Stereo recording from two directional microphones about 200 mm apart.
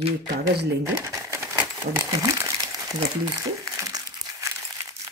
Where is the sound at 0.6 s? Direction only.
15° right (ahead or behind).